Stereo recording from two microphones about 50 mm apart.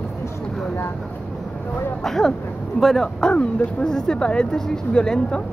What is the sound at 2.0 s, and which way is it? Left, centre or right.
Vehicle, centre.